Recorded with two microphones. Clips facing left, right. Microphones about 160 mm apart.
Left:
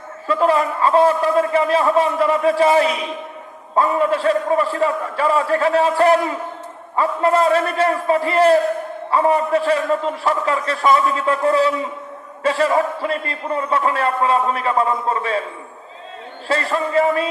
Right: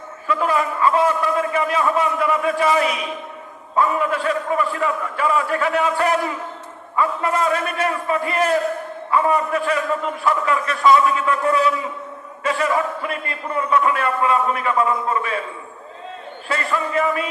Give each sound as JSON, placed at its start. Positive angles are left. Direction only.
{"t": 0.3, "sound": "a man's voice", "side_deg": 30}
{"t": 16.5, "sound": "a man's voice", "side_deg": 30}